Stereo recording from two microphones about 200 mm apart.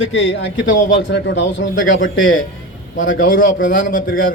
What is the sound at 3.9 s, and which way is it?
Speech, 45° left (ahead or behind).